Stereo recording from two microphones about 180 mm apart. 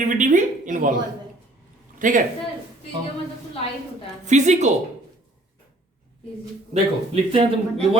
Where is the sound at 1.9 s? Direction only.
45° right (ahead or behind).